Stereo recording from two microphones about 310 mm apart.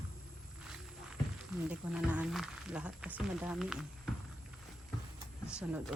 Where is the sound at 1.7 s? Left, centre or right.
Centre.